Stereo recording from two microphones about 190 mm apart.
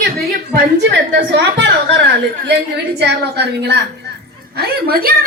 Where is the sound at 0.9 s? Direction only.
65° right (ahead or behind).